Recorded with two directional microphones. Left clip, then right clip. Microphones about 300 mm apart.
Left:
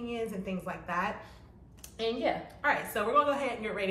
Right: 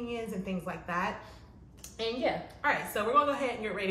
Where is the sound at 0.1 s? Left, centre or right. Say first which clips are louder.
Left 1 dB; centre.